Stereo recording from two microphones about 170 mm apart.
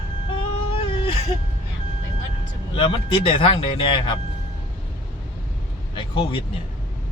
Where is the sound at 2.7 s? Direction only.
30° left (ahead or behind).